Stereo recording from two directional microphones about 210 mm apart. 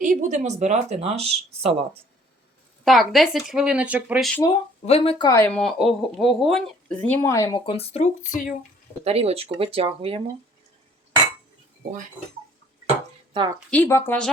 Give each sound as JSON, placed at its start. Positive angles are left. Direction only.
{"t": 0.0, "sound": "speech", "side_deg": -35}
{"t": 2.8, "sound": "speech", "side_deg": 0}
{"t": 4.9, "sound": "speech", "side_deg": 30}
{"t": 9.0, "sound": "speech", "side_deg": -30}
{"t": 13.3, "sound": "speech", "side_deg": -20}
{"t": 13.7, "sound": "speech", "side_deg": 10}